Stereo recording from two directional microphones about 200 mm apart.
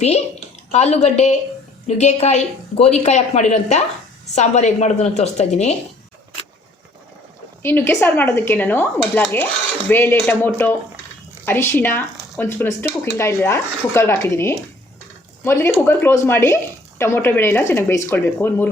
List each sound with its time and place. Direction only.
0.7 s a woman's voice: 35° left (ahead or behind)
7.6 s speech: 10° left (ahead or behind)